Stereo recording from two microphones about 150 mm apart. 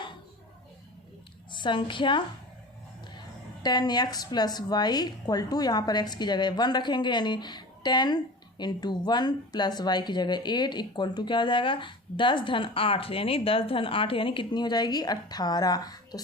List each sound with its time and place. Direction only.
1.5 s a woman's voice: 35° left (ahead or behind)
3.6 s a woman's voice: 25° left (ahead or behind)